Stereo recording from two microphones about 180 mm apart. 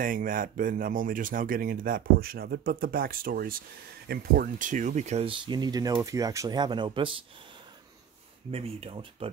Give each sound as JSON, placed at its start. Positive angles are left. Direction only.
{"t": 0.0, "sound": "speech", "side_deg": -50}
{"t": 8.5, "sound": "speech", "side_deg": -35}